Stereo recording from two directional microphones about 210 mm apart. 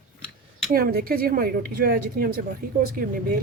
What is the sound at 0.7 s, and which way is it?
A woman's voice, 45° right (ahead or behind).